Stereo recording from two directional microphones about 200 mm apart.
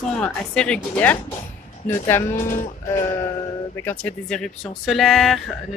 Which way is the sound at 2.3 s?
40° left (ahead or behind).